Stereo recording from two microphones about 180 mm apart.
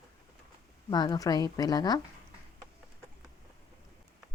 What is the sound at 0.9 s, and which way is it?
A woman's voice, 25° left (ahead or behind).